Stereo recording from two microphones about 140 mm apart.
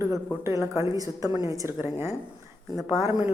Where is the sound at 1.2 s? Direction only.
30° left (ahead or behind).